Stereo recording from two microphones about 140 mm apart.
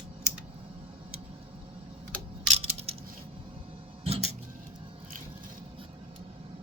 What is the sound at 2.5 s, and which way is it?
Coin, 45° right (ahead or behind).